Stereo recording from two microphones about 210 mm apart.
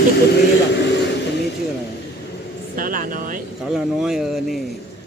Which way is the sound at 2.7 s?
40° right (ahead or behind).